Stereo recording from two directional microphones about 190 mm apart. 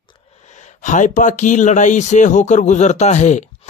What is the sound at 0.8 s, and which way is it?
Speech, 40° left (ahead or behind).